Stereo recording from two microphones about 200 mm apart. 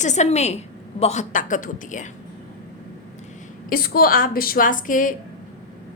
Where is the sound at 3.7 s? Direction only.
45° left (ahead or behind).